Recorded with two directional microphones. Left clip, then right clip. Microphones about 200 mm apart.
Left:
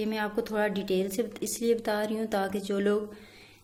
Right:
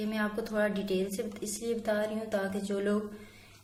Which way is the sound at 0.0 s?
40° left (ahead or behind).